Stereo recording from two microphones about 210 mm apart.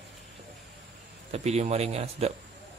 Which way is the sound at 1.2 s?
30° right (ahead or behind).